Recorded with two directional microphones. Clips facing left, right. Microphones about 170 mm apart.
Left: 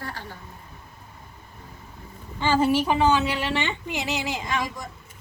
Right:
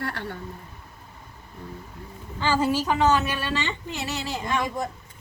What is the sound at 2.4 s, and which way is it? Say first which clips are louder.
A woman's voice: left 2 dB; 20° left (ahead or behind).